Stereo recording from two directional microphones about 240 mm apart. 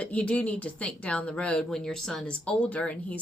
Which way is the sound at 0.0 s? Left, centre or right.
Centre.